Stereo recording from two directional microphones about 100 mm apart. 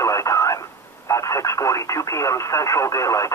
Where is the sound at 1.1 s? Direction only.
30° left (ahead or behind).